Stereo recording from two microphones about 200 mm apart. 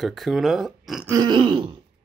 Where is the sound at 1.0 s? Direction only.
20° right (ahead or behind).